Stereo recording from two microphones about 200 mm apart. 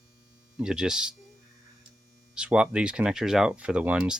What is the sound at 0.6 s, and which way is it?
Speech, 5° right (ahead or behind).